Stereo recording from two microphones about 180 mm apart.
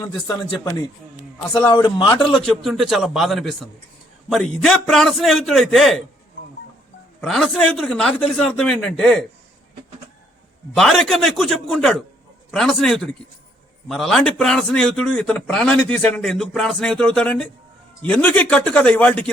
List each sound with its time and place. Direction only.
0.3 s a man's voice: 20° left (ahead or behind)
2.5 s a man's voice: centre (ahead or behind)
7.2 s a man's voice: centre (ahead or behind)
10.8 s a man's voice: centre (ahead or behind)